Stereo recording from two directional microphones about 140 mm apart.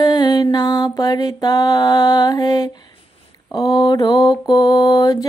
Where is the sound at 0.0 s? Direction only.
30° left (ahead or behind).